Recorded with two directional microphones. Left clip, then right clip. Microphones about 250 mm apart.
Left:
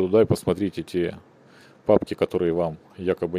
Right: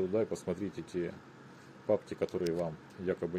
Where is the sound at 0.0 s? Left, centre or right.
Left.